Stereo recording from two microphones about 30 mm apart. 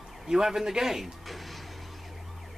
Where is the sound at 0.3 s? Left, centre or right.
Centre.